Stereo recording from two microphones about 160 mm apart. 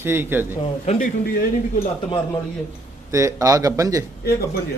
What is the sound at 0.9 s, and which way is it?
Speech, 75° left (ahead or behind).